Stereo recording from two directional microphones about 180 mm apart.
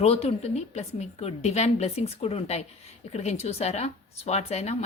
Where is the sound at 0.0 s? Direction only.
35° left (ahead or behind).